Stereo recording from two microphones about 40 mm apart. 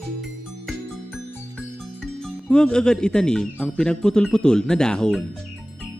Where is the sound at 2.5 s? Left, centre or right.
Left.